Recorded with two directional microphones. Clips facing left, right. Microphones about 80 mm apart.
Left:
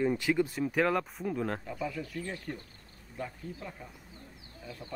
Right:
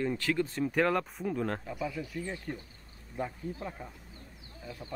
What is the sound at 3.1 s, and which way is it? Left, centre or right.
Speech, right.